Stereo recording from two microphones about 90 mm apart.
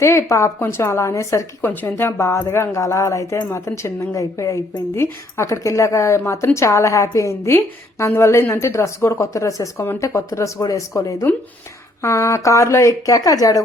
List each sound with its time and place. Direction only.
0.0 s speech: 30° left (ahead or behind)